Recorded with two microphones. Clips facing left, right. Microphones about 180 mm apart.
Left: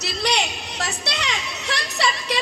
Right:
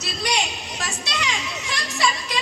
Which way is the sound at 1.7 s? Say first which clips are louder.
Even; 65° left (ahead or behind).